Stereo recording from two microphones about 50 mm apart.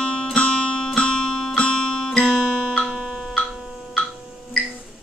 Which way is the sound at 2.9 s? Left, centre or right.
Centre.